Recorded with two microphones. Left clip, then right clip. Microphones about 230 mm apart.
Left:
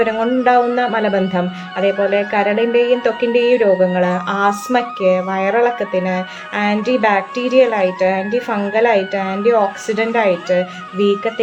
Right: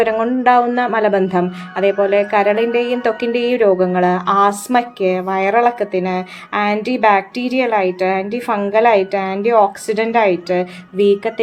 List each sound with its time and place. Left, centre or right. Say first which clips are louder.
0.0 s speech: right 1 dB; right